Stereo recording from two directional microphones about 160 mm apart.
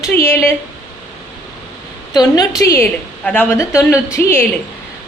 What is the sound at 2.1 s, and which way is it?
A woman's voice, 25° left (ahead or behind).